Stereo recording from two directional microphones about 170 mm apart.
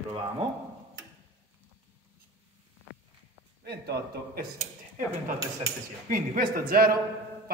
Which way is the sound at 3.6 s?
75° right (ahead or behind).